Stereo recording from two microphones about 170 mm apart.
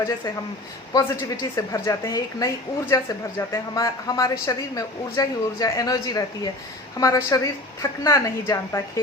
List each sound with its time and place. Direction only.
0.9 s a woman's voice: 20° left (ahead or behind)